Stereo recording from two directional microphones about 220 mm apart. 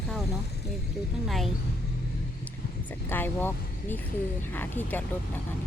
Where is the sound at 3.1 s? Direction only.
10° left (ahead or behind).